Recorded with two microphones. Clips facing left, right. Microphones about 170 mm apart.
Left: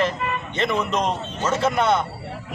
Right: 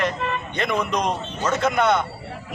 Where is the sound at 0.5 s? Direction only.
25° left (ahead or behind).